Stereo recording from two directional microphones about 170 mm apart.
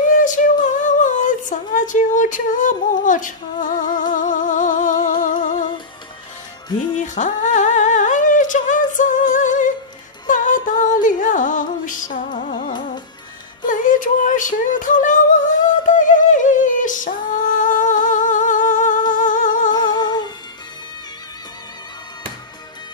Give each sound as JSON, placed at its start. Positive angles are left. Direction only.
{"t": 0.2, "sound": "a sound", "side_deg": 50}
{"t": 4.1, "sound": "music", "side_deg": 50}
{"t": 7.0, "sound": "humming", "side_deg": 45}
{"t": 10.2, "sound": "music", "side_deg": 50}
{"t": 13.7, "sound": "music", "side_deg": 50}
{"t": 19.7, "sound": "music", "side_deg": 25}